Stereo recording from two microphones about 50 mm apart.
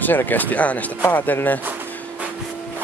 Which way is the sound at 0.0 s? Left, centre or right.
Left.